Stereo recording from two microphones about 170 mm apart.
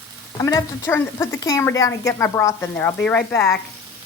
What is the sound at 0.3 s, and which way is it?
A woman's voice, 20° left (ahead or behind).